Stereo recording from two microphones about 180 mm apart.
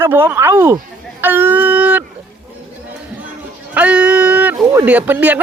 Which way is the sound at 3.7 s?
5° right (ahead or behind).